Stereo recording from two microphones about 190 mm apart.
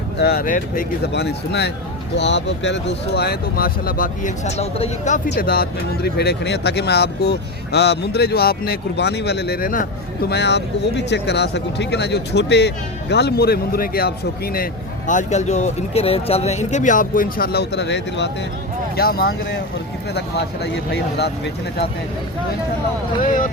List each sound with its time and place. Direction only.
0.2 s speech: 55° left (ahead or behind)
5.3 s speech: 50° left (ahead or behind)
10.2 s speech: 60° left (ahead or behind)
18.9 s speech: 55° left (ahead or behind)
20.7 s speech: 60° left (ahead or behind)